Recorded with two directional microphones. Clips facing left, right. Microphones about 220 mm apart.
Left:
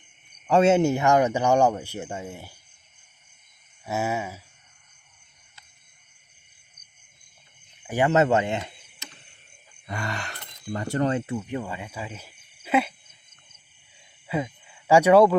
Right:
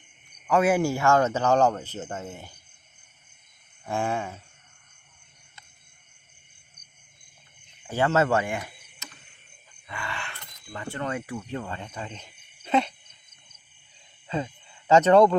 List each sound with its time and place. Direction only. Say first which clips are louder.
0.4 s speech: left 3 dB; 30° left (ahead or behind); by 2.5 s 10° left (ahead or behind)
3.8 s speech: left 1 dB; 5° left (ahead or behind)
7.9 s speech: left 2 dB; 15° left (ahead or behind)
9.8 s speech: left 5 dB; 40° left (ahead or behind)
11.1 s speech: left 4 dB; 25° left (ahead or behind); by 12.9 s 5° left (ahead or behind)
14.3 s speech: left 2 dB; 10° left (ahead or behind)